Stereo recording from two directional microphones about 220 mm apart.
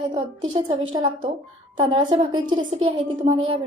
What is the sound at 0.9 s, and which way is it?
A woman's voice, 20° right (ahead or behind).